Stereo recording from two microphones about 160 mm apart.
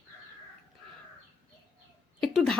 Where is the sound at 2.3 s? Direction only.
5° left (ahead or behind).